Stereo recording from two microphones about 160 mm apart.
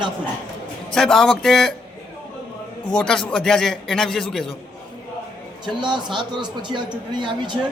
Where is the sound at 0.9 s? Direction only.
5° left (ahead or behind).